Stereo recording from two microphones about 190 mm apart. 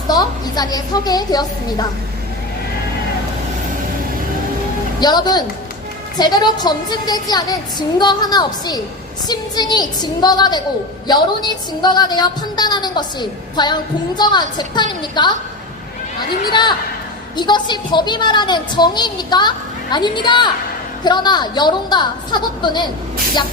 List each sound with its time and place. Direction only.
0.1 s a woman's voice: 20° left (ahead or behind)
4.9 s a woman's voice: 20° left (ahead or behind)
16.5 s a woman's voice: 25° left (ahead or behind)